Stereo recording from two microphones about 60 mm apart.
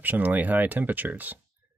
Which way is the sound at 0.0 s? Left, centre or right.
Right.